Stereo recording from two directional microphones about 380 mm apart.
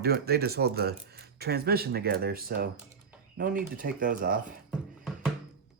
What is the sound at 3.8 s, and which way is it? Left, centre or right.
Speech, right.